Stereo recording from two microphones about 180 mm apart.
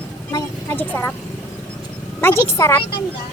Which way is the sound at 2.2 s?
15° left (ahead or behind).